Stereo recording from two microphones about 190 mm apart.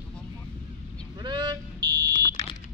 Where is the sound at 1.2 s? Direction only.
25° right (ahead or behind).